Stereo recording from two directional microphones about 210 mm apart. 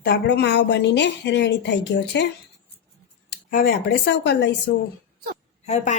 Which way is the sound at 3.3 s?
45° left (ahead or behind).